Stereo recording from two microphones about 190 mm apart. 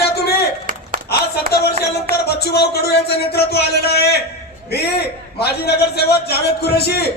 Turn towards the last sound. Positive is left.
turn(degrees=55)  # may be behind; listen again after turning